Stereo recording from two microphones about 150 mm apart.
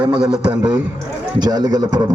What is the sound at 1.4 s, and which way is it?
Speech, 25° right (ahead or behind).